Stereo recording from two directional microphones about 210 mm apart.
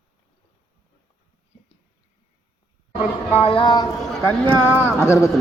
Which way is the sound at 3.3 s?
25° left (ahead or behind).